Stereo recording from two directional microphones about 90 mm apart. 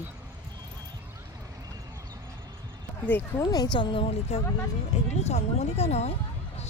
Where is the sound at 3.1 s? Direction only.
20° left (ahead or behind).